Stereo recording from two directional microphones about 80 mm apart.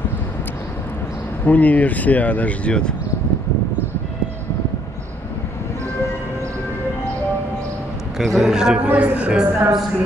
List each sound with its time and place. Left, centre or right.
1.4 s speech: centre
8.2 s a man's voice: centre
8.8 s speech: centre